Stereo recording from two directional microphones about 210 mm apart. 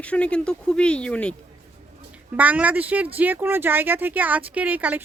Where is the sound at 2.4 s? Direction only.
5° right (ahead or behind).